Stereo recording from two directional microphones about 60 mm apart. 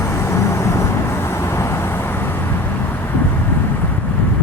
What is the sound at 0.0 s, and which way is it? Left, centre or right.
Vehicle, left.